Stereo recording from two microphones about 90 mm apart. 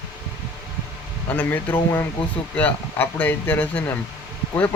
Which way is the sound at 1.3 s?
20° left (ahead or behind).